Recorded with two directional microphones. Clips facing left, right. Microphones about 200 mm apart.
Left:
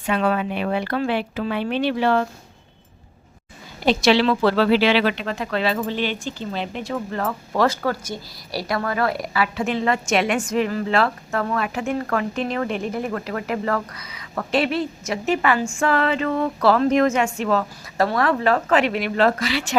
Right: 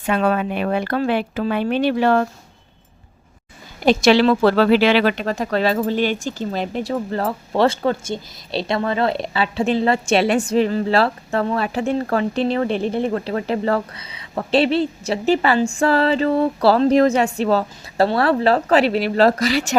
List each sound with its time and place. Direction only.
0.0 s speech: 45° right (ahead or behind)
3.8 s speech: 45° right (ahead or behind)